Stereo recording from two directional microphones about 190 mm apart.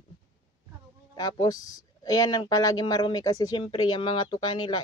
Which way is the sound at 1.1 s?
20° left (ahead or behind).